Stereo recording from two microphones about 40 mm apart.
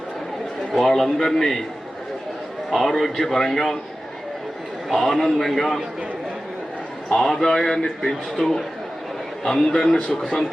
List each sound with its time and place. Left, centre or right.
0.9 s a man's voice: centre
2.6 s a man's voice: centre
4.9 s a man's voice: centre
7.2 s a man's voice: centre